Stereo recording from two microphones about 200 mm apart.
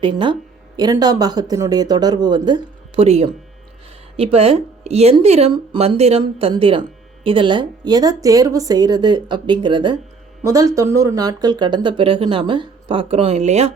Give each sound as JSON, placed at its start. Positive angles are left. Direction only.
{"t": 0.0, "sound": "speech", "side_deg": -25}